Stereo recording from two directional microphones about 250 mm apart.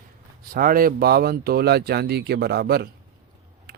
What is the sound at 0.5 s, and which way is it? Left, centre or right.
Speech, right.